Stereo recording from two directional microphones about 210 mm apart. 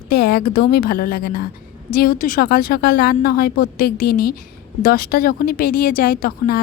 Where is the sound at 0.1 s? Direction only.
50° left (ahead or behind).